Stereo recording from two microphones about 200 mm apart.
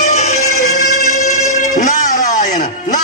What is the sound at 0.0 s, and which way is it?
Music, 35° left (ahead or behind).